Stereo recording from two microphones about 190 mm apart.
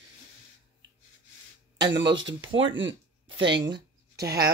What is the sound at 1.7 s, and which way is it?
Speech, 20° right (ahead or behind).